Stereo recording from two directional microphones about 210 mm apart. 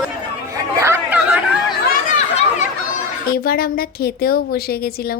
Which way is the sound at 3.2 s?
45° left (ahead or behind).